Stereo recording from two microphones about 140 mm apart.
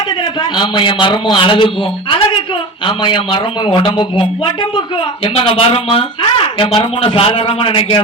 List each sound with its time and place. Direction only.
0.5 s speech: 35° left (ahead or behind)